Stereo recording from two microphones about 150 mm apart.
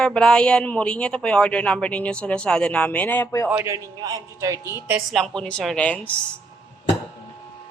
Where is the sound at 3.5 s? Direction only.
15° right (ahead or behind).